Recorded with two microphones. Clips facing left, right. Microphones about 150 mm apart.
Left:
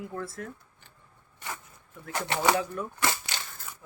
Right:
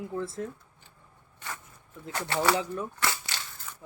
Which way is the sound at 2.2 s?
20° left (ahead or behind).